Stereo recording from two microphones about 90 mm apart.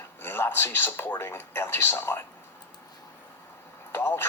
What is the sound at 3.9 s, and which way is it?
Speech, 25° left (ahead or behind).